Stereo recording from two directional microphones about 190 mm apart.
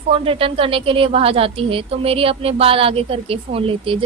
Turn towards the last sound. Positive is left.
turn(degrees=-30)  # may be behind; listen again after turning